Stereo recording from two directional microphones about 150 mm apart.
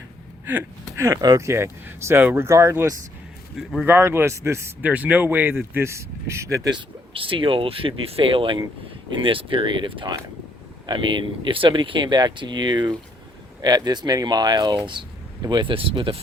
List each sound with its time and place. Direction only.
0.4 s speech: 15° right (ahead or behind)
3.6 s speech: centre (ahead or behind)
3.8 s speech: 15° right (ahead or behind)
6.7 s speech: 35° right (ahead or behind)